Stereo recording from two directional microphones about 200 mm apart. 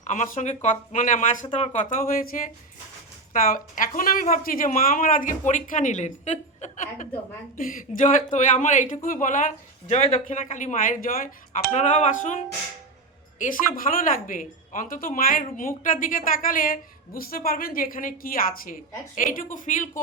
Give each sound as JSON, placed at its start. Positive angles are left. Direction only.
{"t": 0.0, "sound": "a woman's voice", "side_deg": 35}
{"t": 13.4, "sound": "a woman's voice", "side_deg": 40}